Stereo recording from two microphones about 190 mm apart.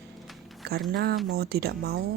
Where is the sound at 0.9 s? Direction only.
55° right (ahead or behind).